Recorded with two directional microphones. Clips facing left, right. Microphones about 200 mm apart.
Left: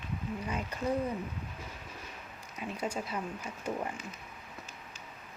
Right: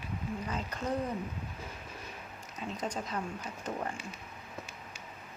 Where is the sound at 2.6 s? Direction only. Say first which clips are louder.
Left 1 dB; 10° left (ahead or behind).